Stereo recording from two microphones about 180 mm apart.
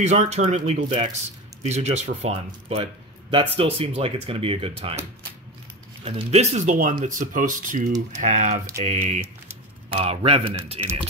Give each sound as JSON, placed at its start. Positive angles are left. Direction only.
{"t": 0.0, "sound": "speech", "side_deg": -40}
{"t": 6.0, "sound": "a man's voice", "side_deg": -35}